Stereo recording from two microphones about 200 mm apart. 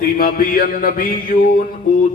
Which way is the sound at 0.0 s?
45° left (ahead or behind).